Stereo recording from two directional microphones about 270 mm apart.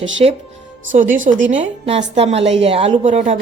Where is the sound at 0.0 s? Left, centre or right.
Right.